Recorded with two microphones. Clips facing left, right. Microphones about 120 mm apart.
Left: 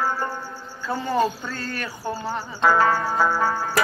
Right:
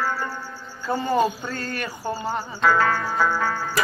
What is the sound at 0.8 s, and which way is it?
Speech, 5° right (ahead or behind).